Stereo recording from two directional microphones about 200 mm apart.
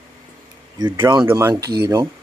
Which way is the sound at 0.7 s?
20° right (ahead or behind).